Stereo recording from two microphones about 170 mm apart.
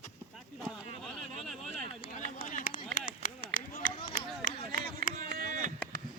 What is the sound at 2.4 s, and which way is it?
Run, 50° left (ahead or behind).